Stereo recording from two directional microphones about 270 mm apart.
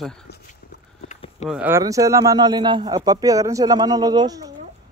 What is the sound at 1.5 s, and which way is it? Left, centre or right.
A man's voice, centre.